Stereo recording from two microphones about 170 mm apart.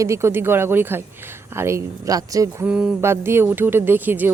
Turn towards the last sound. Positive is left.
turn(degrees=-10)  # may be behind; listen again after turning